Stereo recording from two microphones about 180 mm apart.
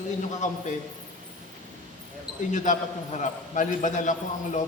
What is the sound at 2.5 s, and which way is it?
A man's voice, 45° left (ahead or behind).